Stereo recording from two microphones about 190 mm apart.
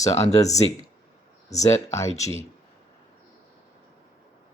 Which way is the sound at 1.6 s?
15° left (ahead or behind).